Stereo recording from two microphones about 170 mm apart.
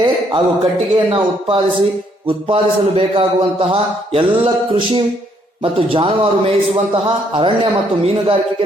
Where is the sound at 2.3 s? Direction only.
35° right (ahead or behind).